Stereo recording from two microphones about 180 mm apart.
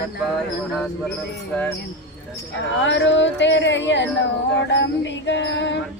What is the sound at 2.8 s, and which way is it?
Speech, 85° left.